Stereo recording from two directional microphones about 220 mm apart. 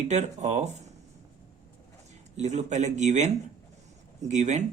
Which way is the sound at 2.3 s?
30° right (ahead or behind).